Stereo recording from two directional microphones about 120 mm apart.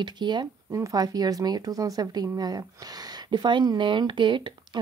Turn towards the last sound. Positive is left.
turn(degrees=-45)  # may be behind; listen again after turning